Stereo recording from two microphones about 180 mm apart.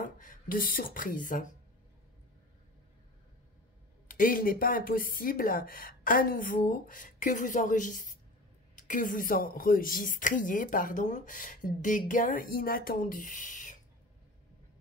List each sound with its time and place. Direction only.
0.0 s speech: 50° left (ahead or behind)
4.1 s speech: 50° left (ahead or behind)